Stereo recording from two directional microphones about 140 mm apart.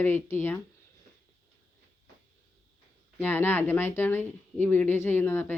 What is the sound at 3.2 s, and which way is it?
Speech, 15° left (ahead or behind).